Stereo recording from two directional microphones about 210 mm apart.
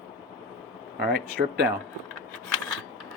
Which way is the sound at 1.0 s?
50° right (ahead or behind).